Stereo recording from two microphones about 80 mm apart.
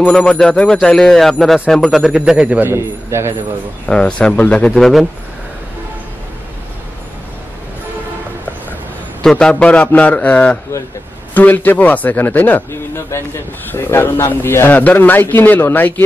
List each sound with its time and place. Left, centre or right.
0.0 s speech: centre
2.7 s a man's voice: right
3.8 s speech: centre
9.2 s speech: centre
12.9 s speech: left